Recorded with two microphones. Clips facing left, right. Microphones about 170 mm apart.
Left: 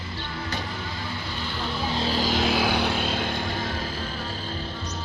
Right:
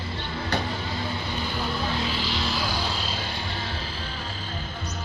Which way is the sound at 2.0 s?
40° left (ahead or behind).